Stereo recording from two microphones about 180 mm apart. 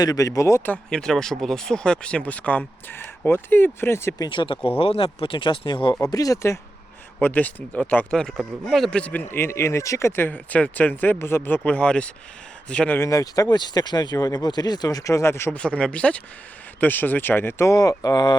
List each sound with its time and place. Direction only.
0.0 s speech: 20° left (ahead or behind)
4.3 s speech: 25° left (ahead or behind)